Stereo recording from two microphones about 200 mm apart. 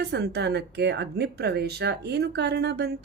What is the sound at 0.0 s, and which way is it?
Speech, 55° right (ahead or behind).